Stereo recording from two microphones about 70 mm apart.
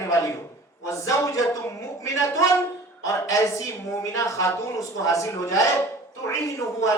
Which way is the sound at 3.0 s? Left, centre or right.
Left.